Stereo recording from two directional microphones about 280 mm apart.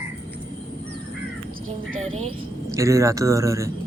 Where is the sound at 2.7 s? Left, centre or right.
Centre.